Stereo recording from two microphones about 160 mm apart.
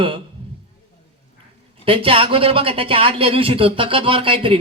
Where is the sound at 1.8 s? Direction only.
35° right (ahead or behind).